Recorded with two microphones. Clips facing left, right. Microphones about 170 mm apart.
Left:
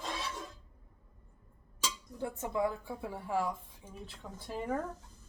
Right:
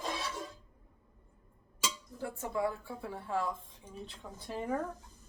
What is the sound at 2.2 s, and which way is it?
Speech, 20° left (ahead or behind).